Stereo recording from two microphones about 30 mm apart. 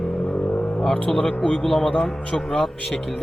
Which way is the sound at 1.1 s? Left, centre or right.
Centre.